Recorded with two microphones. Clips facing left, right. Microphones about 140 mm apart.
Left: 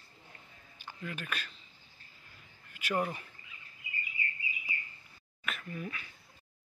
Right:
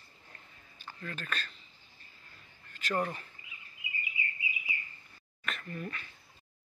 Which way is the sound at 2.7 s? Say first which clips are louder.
Even; 10° left (ahead or behind).